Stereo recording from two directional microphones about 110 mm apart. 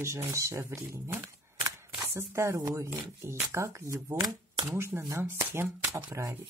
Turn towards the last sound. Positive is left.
turn(degrees=-25)  # may be behind; listen again after turning